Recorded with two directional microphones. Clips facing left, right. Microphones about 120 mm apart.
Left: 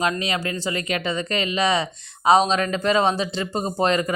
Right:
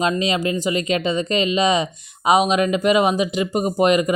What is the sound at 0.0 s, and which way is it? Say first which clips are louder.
Speech: right 4 dB; 20° right (ahead or behind).